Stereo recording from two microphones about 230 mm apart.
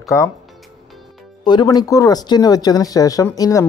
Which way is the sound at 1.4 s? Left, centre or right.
Centre.